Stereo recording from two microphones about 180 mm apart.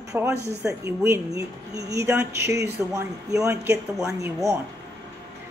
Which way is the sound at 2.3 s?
70° right (ahead or behind).